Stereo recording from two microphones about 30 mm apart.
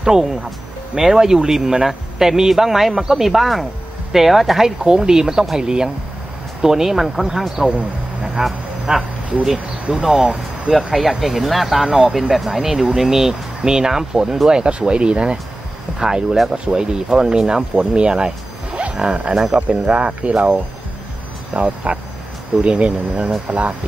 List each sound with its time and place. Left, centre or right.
0.0 s speech: right; by 4.6 s centre
4.6 s speech: right
7.6 s speech: right
8.9 s speech: centre
9.9 s speech: right
11.0 s speech: centre
13.3 s speech: right
14.5 s speech: right
18.7 s wild animals: right
18.9 s speech: right
21.5 s speech: right